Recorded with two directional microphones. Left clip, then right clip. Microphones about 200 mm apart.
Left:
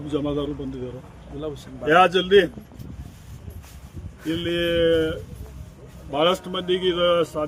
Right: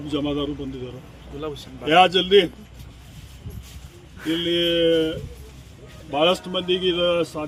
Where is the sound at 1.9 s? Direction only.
10° left (ahead or behind).